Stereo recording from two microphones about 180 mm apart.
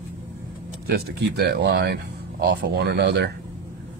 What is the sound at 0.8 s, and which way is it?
Speech, 60° right (ahead or behind).